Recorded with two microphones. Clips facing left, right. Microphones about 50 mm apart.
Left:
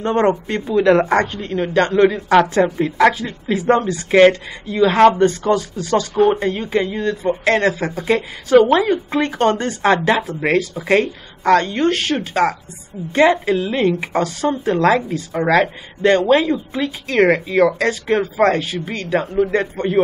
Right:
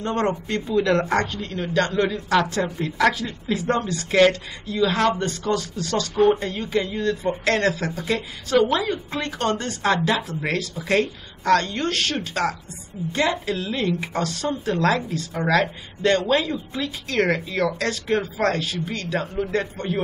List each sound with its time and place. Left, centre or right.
0.0 s a woman's voice: left
5.6 s speech: centre
6.1 s a woman's voice: left
6.4 s speech: left
8.0 s a woman's voice: left